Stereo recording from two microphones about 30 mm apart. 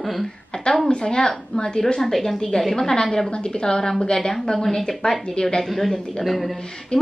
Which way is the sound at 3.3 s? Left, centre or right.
Left.